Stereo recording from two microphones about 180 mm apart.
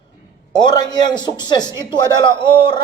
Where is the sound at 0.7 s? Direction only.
20° left (ahead or behind).